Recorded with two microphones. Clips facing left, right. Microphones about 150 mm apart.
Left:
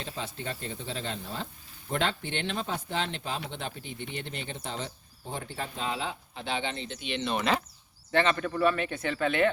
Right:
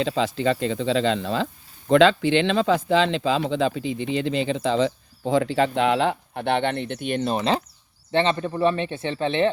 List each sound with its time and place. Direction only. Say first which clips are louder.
0.0 s speech: right 15 dB; 90° right; by 9.5 s 25° right (ahead or behind)